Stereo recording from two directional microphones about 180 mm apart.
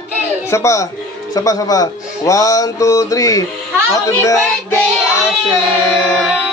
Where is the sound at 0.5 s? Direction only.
15° left (ahead or behind).